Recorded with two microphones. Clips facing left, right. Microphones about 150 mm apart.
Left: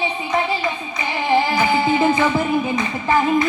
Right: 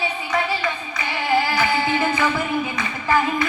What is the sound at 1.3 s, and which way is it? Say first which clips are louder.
Music: left 3 dB; 20° left (ahead or behind).